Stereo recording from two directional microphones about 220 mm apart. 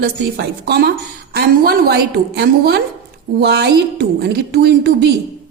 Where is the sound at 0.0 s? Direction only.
50° right (ahead or behind).